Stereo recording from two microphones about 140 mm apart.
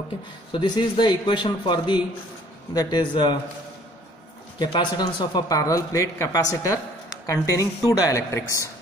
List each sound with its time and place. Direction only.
0.5 s speech: 35° left (ahead or behind)
4.6 s speech: 30° left (ahead or behind)